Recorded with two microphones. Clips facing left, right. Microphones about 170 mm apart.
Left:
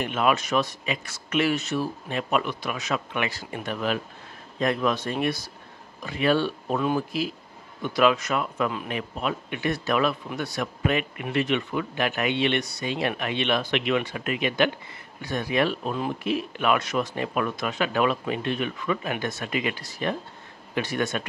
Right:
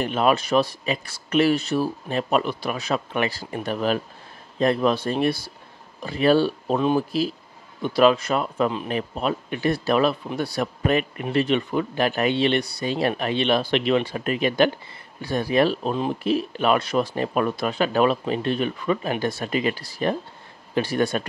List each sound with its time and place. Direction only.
0.0 s speech: 35° right (ahead or behind)